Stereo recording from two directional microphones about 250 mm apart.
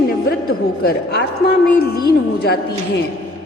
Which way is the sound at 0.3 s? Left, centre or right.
Left.